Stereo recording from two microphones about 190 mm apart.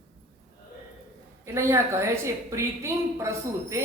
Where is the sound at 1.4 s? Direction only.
15° right (ahead or behind).